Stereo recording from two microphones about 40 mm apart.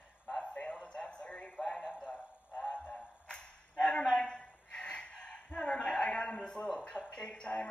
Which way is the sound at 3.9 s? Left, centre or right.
Left.